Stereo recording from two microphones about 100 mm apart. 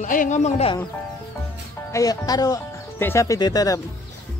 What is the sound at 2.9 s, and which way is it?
Speech, 25° left (ahead or behind).